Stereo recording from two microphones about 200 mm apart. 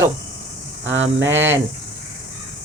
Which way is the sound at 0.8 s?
70° right (ahead or behind).